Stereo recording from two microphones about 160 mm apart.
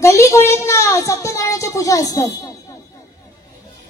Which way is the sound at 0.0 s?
20° left (ahead or behind).